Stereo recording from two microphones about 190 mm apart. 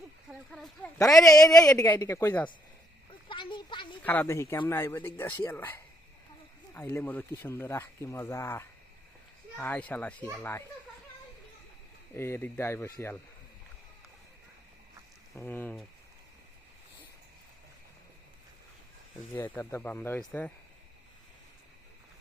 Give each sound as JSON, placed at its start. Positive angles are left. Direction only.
{"t": 0.3, "sound": "speech", "side_deg": 0}
{"t": 0.9, "sound": "speech", "side_deg": 15}
{"t": 3.1, "sound": "a sound", "side_deg": 25}
{"t": 4.0, "sound": "speech", "side_deg": 10}
{"t": 12.1, "sound": "speech", "side_deg": 10}
{"t": 15.4, "sound": "speech", "side_deg": 10}
{"t": 19.5, "sound": "speech", "side_deg": 15}